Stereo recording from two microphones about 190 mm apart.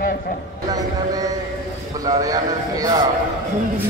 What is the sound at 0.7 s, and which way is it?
Speech, 20° right (ahead or behind).